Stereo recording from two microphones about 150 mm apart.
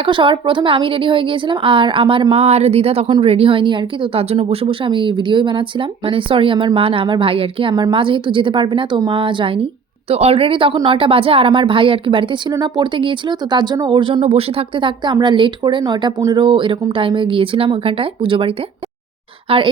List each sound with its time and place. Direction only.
0.0 s a woman's voice: 35° right (ahead or behind)